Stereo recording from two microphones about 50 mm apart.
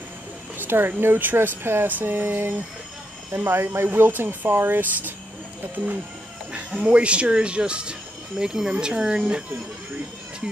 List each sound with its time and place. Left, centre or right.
0.6 s speech: right
1.9 s speech: right
6.5 s speech: right